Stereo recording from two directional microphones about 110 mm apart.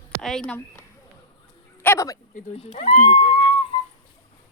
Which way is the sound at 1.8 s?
15° left (ahead or behind).